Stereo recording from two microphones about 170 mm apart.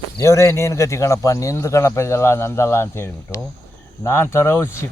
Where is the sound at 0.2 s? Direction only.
15° left (ahead or behind).